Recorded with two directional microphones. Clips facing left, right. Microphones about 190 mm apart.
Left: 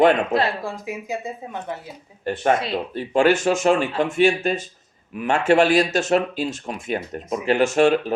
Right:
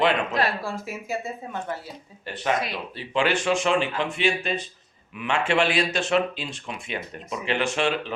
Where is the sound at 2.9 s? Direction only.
45° left (ahead or behind).